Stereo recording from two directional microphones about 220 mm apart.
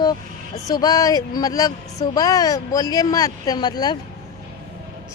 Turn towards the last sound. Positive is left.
turn(degrees=20)  # may be behind; listen again after turning